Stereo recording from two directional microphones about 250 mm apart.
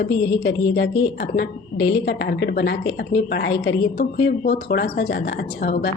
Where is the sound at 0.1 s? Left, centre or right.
Left.